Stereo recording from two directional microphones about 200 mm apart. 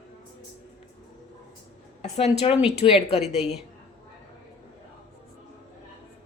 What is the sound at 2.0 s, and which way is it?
Speech, 30° left (ahead or behind).